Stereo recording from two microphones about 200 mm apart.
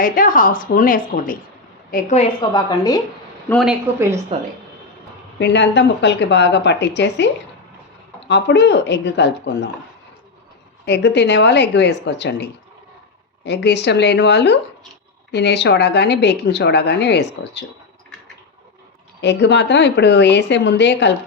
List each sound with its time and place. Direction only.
0.0 s a woman's voice: 45° left (ahead or behind)
2.4 s a woman's voice: 20° left (ahead or behind)
3.5 s speech: centre (ahead or behind)
4.3 s a woman's voice: 25° right (ahead or behind)
5.4 s a woman's voice: 60° left (ahead or behind)
8.3 s a woman's voice: 60° left (ahead or behind)
10.8 s a woman's voice: 55° left (ahead or behind)
19.2 s a woman's voice: 60° left (ahead or behind)